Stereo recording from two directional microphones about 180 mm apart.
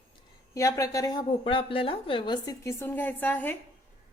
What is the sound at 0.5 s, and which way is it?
A woman's voice, 20° left (ahead or behind).